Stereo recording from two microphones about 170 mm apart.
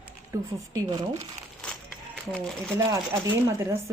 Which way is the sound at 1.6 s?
5° left (ahead or behind).